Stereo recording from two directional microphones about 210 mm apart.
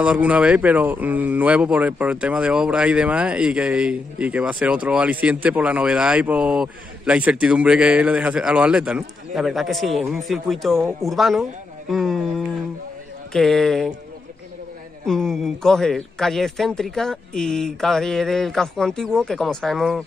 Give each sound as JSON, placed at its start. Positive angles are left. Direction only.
{"t": 0.0, "sound": "speech", "side_deg": -5}
{"t": 11.9, "sound": "a sound", "side_deg": 0}
{"t": 13.3, "sound": "speech", "side_deg": 0}
{"t": 15.0, "sound": "speech", "side_deg": 0}